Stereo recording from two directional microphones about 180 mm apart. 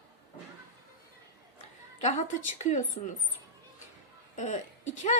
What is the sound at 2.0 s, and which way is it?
A woman's voice, 40° left (ahead or behind).